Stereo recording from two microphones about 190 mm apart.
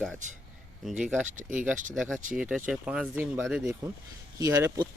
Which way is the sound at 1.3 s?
40° right (ahead or behind).